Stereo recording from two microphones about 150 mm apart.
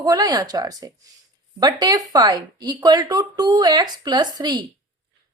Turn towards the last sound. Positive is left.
turn(degrees=-30)  # may be behind; listen again after turning